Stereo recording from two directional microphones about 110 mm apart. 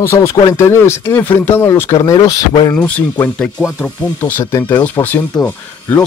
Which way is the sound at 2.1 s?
40° left (ahead or behind).